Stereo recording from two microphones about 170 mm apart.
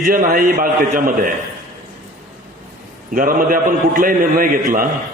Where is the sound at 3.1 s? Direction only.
55° right (ahead or behind).